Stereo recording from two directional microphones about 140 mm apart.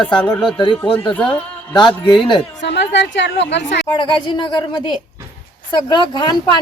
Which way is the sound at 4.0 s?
35° left (ahead or behind).